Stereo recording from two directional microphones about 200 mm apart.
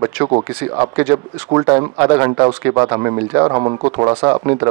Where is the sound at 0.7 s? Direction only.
15° right (ahead or behind).